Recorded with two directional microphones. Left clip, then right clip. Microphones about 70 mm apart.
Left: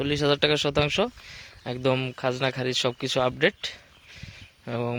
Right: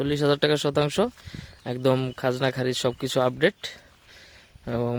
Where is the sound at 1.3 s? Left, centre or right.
Right.